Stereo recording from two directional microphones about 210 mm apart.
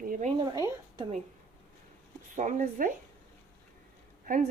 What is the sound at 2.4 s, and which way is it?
Speech, 35° right (ahead or behind).